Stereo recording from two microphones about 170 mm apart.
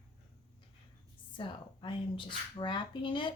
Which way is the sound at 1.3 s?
30° left (ahead or behind).